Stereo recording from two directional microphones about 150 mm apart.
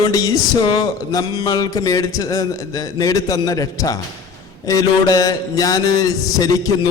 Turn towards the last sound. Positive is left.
turn(degrees=25)  # may be behind; listen again after turning